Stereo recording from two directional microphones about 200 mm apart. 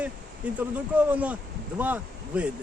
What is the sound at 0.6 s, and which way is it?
Speech, 10° right (ahead or behind).